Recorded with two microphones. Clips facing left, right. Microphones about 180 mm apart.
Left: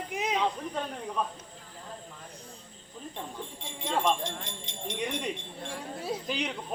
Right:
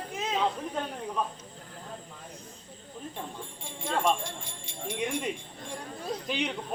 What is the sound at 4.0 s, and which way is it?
Speech, 10° right (ahead or behind).